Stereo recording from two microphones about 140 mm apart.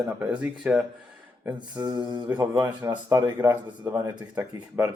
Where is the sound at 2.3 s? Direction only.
10° right (ahead or behind).